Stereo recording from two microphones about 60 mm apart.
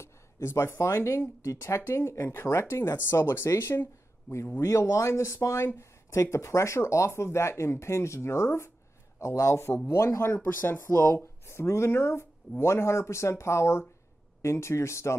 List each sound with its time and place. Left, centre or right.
0.0 s a man's voice: left